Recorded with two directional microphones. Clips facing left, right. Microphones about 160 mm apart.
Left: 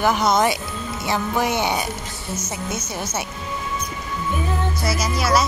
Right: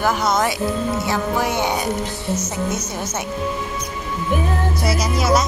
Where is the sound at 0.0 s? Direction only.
15° left (ahead or behind).